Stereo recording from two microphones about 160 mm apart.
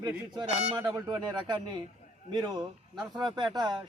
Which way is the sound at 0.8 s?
20° right (ahead or behind).